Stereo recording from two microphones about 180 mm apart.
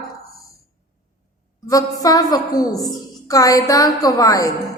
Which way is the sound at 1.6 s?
20° left (ahead or behind).